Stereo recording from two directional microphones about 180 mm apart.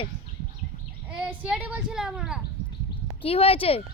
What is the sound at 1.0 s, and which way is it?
Speech, 5° right (ahead or behind).